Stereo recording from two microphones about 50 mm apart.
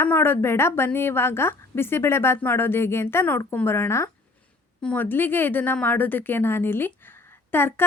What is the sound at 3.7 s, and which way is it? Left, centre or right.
Speech, left.